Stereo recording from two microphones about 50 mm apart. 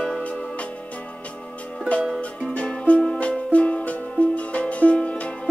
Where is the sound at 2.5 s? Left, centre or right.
Left.